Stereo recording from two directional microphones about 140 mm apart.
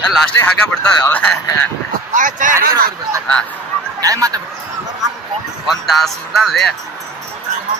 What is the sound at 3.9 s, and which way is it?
Speech, 25° right (ahead or behind).